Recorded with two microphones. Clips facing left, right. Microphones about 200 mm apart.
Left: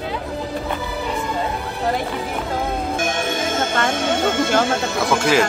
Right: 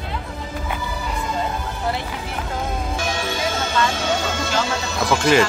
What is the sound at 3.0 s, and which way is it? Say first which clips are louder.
Music: left 2 dB; 50° left (ahead or behind).